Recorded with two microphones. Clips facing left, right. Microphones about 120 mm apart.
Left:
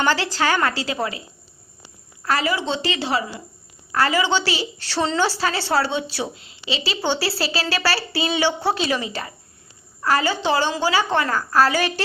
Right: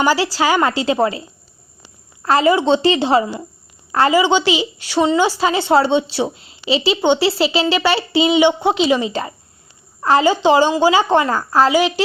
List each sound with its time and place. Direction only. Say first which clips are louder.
0.0 s a woman's voice: right 4 dB; 10° right (ahead or behind); by 1.2 s 30° right (ahead or behind)
2.2 s a woman's voice: right 8 dB; 25° right (ahead or behind)